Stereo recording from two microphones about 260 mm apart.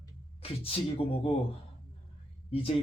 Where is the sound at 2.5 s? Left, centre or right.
Left.